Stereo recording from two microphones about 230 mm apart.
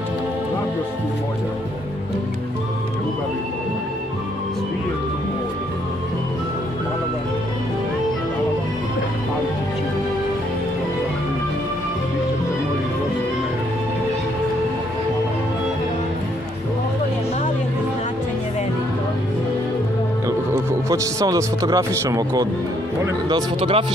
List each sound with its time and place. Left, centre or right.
20.2 s a man's voice: centre